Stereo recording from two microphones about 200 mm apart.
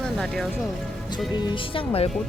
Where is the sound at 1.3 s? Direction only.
25° left (ahead or behind).